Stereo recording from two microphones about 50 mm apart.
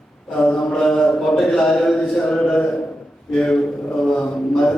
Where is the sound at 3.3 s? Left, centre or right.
Centre.